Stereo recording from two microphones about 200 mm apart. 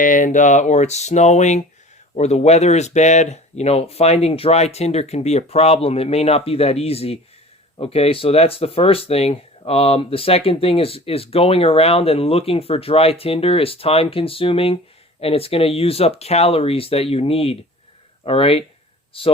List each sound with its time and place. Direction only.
0.0 s speech: 40° left (ahead or behind)